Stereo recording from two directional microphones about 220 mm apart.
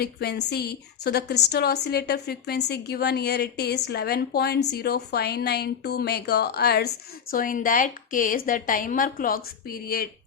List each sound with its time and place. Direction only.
0.0 s a woman's voice: 45° left (ahead or behind)